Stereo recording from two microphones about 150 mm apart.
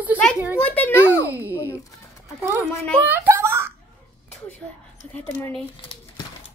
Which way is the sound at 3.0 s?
15° right (ahead or behind).